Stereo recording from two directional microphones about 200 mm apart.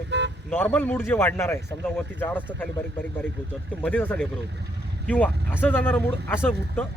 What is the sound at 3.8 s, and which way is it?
Speech, 5° left (ahead or behind).